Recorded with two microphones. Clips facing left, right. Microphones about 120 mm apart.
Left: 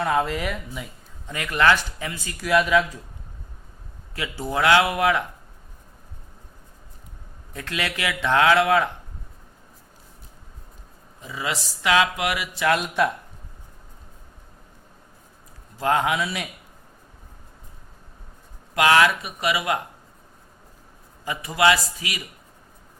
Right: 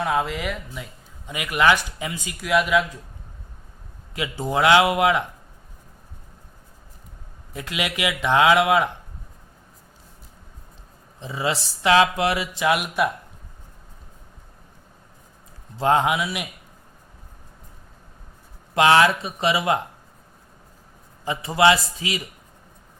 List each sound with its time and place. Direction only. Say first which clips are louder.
0.0 s speech: left 1 dB; centre (ahead or behind)
1.3 s speech: right 1 dB; 15° right (ahead or behind)
2.4 s speech: left 1 dB; centre (ahead or behind)
4.1 s speech: right 3 dB; 20° right (ahead or behind)
7.5 s speech: right 1 dB; 15° right (ahead or behind)
11.2 s speech: right 4 dB; 25° right (ahead or behind)
12.6 s speech: even; 10° right (ahead or behind)
15.8 s speech: right 2 dB; 25° right (ahead or behind)
16.2 s speech: even; 10° right (ahead or behind)
18.7 s speech: right 2 dB; 25° right (ahead or behind)
21.2 s speech: right 2 dB; 25° right (ahead or behind)